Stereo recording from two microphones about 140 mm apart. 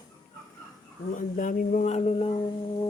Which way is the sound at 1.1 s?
70° left (ahead or behind).